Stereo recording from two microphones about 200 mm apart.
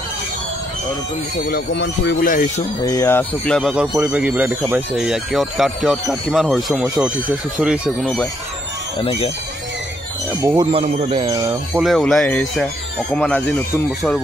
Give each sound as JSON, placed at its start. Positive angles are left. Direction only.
{"t": 1.5, "sound": "speech", "side_deg": 55}
{"t": 2.8, "sound": "speech", "side_deg": 15}
{"t": 10.4, "sound": "speech", "side_deg": -15}
{"t": 10.7, "sound": "speech", "side_deg": -30}
{"t": 11.2, "sound": "speech", "side_deg": -15}
{"t": 11.8, "sound": "speech", "side_deg": 0}